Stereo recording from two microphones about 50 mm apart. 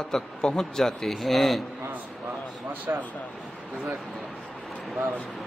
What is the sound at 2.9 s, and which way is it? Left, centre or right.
Speech, right.